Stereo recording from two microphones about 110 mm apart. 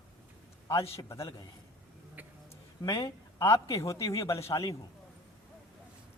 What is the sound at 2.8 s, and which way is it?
A man's voice, 35° left (ahead or behind).